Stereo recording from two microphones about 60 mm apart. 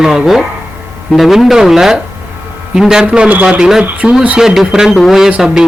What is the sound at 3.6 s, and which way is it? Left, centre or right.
A man's voice, centre.